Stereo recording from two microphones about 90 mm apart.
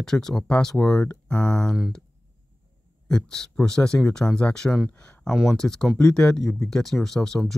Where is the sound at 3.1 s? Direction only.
10° left (ahead or behind).